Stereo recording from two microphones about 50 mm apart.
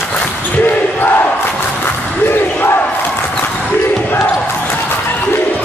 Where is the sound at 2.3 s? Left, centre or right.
Left.